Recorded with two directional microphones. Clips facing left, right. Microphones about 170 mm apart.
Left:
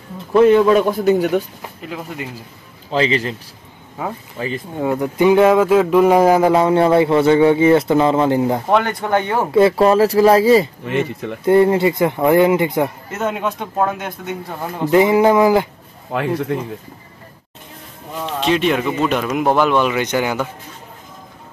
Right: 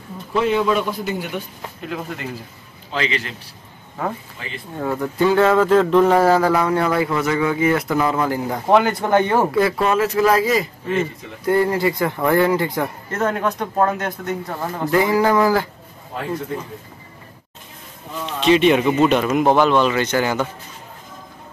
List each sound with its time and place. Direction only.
0.3 s a man's voice: 50° left (ahead or behind)
1.9 s speech: 5° left (ahead or behind)
2.9 s speech: 35° left (ahead or behind)
4.7 s speech: 15° left (ahead or behind)
8.6 s speech: 5° right (ahead or behind)
9.5 s speech: 25° left (ahead or behind)
10.9 s a man's voice: 70° left (ahead or behind)
11.4 s speech: 25° left (ahead or behind)
13.1 s speech: 10° left (ahead or behind)
14.9 s speech: 20° left (ahead or behind)
16.1 s a man's voice: 80° left
18.4 s speech: centre (ahead or behind)
18.9 s speech: 20° right (ahead or behind)
19.1 s speech: centre (ahead or behind)